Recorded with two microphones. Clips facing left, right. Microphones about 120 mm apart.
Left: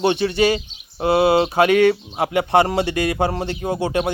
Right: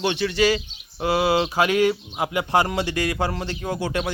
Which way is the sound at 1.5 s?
60° left (ahead or behind).